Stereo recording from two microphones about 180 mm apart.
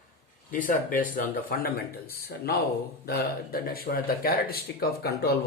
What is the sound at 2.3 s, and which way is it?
Speech, 60° left (ahead or behind).